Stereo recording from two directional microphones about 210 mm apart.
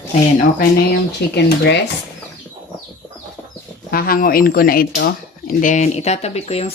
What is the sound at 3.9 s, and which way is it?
Speech, 45° left (ahead or behind).